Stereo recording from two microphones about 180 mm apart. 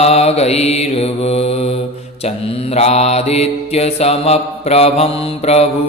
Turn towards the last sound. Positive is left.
turn(degrees=35)  # may be behind; listen again after turning